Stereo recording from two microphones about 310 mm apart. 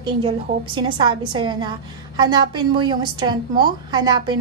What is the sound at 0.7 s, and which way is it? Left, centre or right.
A woman's voice, centre.